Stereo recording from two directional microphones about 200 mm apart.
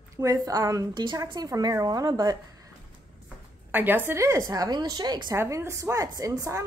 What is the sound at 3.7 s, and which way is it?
A woman's voice, 10° right (ahead or behind).